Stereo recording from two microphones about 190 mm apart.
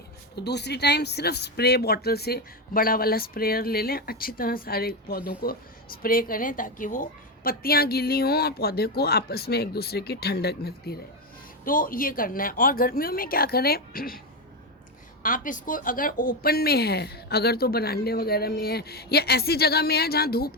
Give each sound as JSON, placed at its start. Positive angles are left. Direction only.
{"t": 0.3, "sound": "speech", "side_deg": 60}
{"t": 15.2, "sound": "speech", "side_deg": 45}